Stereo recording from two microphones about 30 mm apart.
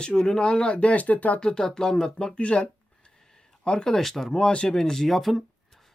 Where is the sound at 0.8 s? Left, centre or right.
Left.